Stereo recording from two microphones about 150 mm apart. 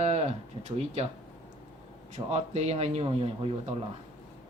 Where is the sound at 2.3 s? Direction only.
45° right (ahead or behind).